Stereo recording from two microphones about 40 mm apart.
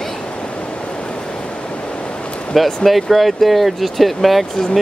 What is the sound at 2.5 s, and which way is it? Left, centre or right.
Speech, centre.